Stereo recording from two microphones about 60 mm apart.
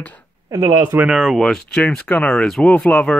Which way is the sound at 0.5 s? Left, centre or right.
Right.